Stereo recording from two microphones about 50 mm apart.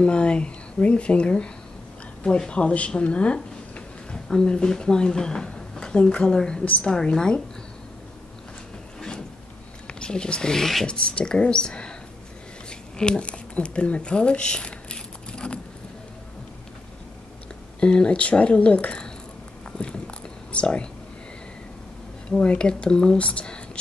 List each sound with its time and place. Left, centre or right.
0.0 s speech: left
9.9 s speech: centre
10.9 s speech: centre
12.6 s a sound: centre
17.7 s speech: centre
19.8 s biting: left
20.5 s speech: left
22.4 s speech: left